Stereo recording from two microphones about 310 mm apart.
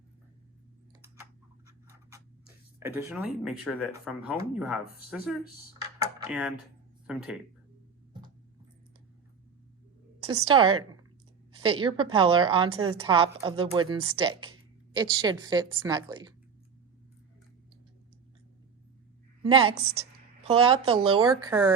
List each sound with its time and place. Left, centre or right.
1.6 s scratch: centre
2.8 s speech: centre
5.8 s computer keyboard: centre
7.1 s speech: centre
10.5 s a woman's voice: centre
19.4 s a woman's voice: centre